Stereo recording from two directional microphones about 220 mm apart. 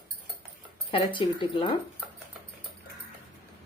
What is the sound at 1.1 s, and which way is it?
Speech, 20° left (ahead or behind).